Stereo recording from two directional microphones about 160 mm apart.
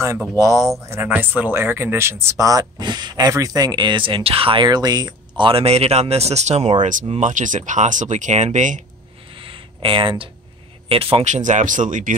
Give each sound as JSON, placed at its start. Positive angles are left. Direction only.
{"t": 0.4, "sound": "speech", "side_deg": -20}
{"t": 5.4, "sound": "speech", "side_deg": -35}
{"t": 9.3, "sound": "a sound", "side_deg": -35}
{"t": 10.9, "sound": "speech", "side_deg": -35}